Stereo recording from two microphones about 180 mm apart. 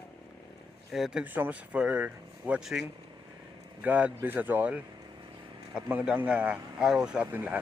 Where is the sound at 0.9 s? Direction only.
5° right (ahead or behind).